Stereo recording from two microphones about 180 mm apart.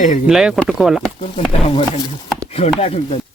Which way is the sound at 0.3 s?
5° right (ahead or behind).